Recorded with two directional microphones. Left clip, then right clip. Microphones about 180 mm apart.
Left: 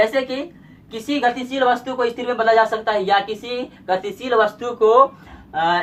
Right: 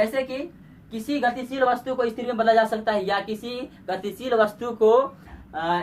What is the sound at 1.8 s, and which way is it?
Speech, 20° right (ahead or behind).